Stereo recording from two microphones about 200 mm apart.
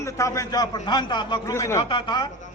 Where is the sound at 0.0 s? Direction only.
15° left (ahead or behind).